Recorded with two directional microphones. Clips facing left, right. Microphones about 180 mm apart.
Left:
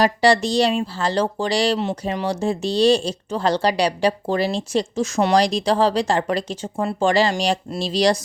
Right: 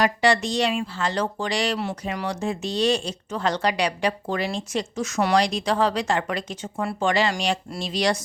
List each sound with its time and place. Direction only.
0.0 s speech: 35° left (ahead or behind)